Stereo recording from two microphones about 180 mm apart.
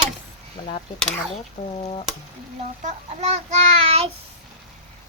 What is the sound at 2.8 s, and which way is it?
A child's voice, 40° right (ahead or behind).